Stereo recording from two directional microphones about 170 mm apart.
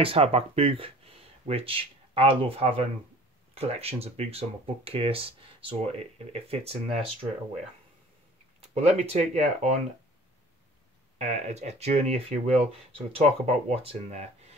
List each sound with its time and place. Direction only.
0.0 s speech: 35° right (ahead or behind)
8.7 s speech: 40° right (ahead or behind)
11.1 s speech: 40° right (ahead or behind)